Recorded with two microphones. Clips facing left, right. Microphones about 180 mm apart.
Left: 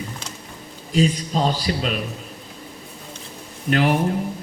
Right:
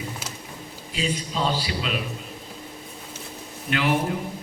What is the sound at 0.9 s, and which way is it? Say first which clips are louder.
A man's voice: left 7 dB; 40° left (ahead or behind).